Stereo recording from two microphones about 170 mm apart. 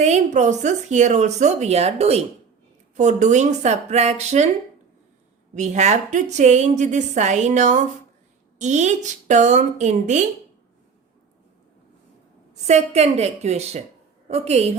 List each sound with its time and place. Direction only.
0.0 s a woman's voice: 45° right (ahead or behind)
5.5 s a woman's voice: 45° right (ahead or behind)
12.6 s a woman's voice: 40° right (ahead or behind)